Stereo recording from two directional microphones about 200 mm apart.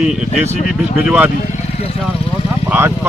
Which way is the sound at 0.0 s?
Centre (ahead or behind).